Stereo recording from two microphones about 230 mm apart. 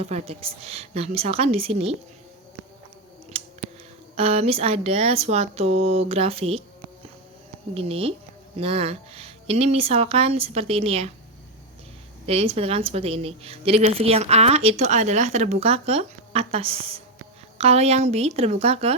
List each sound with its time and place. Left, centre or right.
0.0 s a woman's voice: right
3.3 s scissors: right
4.1 s a woman's voice: right
7.7 s a woman's voice: right
12.2 s a woman's voice: right